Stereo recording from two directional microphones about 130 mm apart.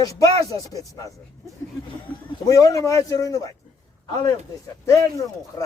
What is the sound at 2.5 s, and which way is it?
Speech, 25° left (ahead or behind).